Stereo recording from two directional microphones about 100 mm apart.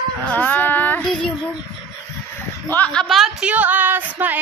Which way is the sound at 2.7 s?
10° left (ahead or behind).